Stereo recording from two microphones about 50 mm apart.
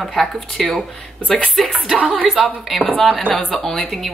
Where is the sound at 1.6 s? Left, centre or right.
Centre.